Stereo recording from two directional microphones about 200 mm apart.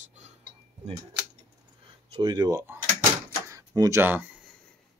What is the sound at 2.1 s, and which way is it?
Speech, 20° right (ahead or behind).